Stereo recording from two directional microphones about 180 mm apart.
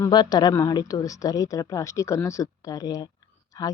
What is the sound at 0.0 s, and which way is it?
A woman's voice, 25° left (ahead or behind).